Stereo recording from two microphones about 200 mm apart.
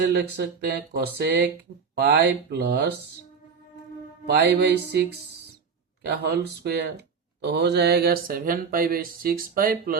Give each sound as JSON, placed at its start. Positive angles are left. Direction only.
{"t": 0.1, "sound": "speech", "side_deg": -60}
{"t": 4.3, "sound": "speech", "side_deg": -55}